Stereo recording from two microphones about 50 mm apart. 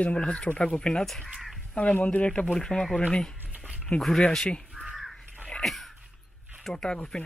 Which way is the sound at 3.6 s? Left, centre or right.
Centre.